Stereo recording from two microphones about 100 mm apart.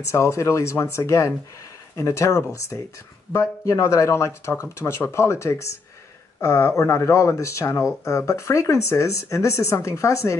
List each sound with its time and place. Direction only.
0.0 s speech: 30° left (ahead or behind)